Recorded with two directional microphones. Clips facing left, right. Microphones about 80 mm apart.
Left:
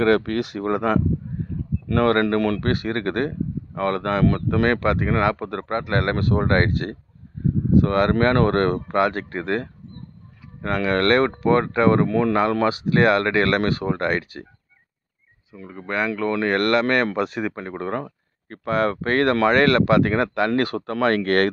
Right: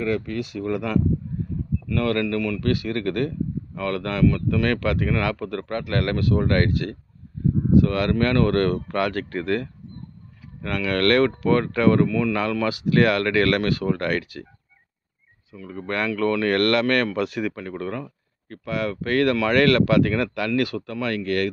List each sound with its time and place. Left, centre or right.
0.0 s speech: left
2.6 s speech: left
12.1 s speech: left
15.5 s speech: left